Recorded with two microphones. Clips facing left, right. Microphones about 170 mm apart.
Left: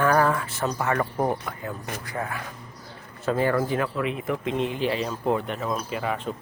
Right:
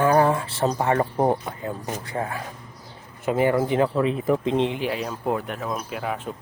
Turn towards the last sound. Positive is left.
turn(degrees=0)  # may be behind; listen again after turning